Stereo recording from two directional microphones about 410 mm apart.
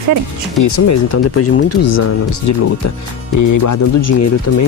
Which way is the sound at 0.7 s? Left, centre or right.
Left.